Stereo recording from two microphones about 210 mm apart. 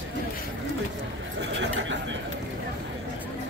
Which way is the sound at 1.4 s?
60° right (ahead or behind).